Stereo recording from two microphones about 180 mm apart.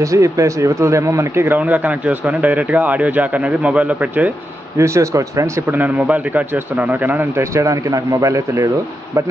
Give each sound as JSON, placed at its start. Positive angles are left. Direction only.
{"t": 0.0, "sound": "speech", "side_deg": -15}